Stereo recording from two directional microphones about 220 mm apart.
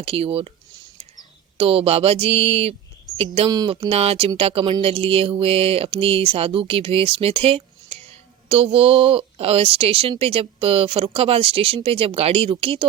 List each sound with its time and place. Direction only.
0.0 s speech: 25° right (ahead or behind)
1.5 s speech: 25° right (ahead or behind)